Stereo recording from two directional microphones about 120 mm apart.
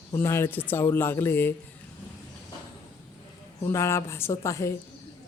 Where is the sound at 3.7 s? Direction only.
25° left (ahead or behind).